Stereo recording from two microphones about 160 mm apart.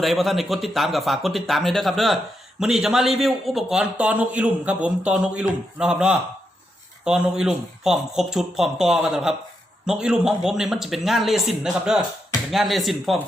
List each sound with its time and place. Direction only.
0.0 s a man's voice: centre (ahead or behind)